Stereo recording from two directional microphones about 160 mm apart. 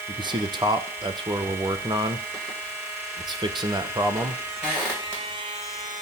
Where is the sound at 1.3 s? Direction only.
15° right (ahead or behind).